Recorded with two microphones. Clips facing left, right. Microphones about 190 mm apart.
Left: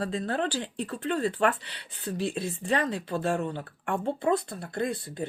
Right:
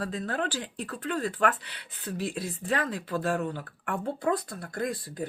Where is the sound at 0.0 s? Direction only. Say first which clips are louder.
Left 2 dB; 30° left (ahead or behind).